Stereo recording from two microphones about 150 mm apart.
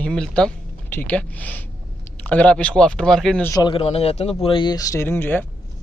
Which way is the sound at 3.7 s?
40° left (ahead or behind).